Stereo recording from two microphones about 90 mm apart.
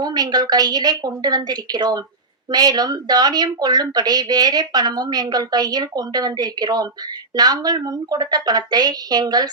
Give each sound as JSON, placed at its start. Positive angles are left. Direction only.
{"t": 0.0, "sound": "speech", "side_deg": -50}